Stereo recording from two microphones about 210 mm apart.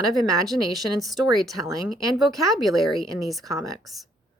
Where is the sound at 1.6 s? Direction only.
15° right (ahead or behind).